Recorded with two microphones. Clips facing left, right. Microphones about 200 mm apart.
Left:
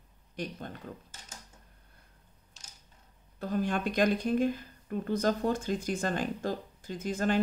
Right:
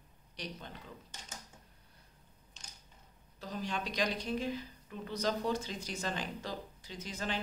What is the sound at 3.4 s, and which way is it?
Speech, 55° left (ahead or behind).